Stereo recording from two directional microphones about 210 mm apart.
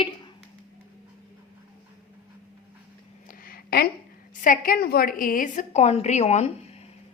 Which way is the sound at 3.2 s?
45° left (ahead or behind).